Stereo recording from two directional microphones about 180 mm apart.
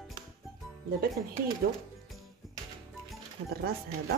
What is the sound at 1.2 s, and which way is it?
Speech, 50° right (ahead or behind).